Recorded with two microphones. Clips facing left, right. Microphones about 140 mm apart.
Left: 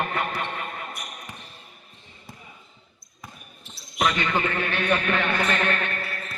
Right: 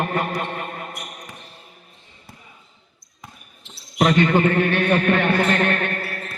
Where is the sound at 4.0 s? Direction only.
45° right (ahead or behind).